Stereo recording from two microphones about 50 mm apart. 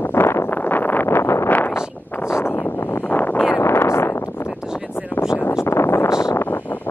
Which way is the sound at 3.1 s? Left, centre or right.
Left.